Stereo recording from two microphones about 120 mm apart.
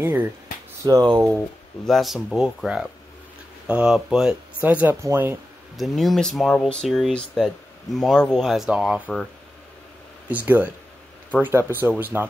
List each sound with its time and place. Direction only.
0.0 s speech: 15° right (ahead or behind)
0.8 s speech: 35° right (ahead or behind)
1.9 s speech: centre (ahead or behind); by 5.4 s 20° right (ahead or behind)
5.8 s speech: centre (ahead or behind)
10.2 s speech: 15° right (ahead or behind)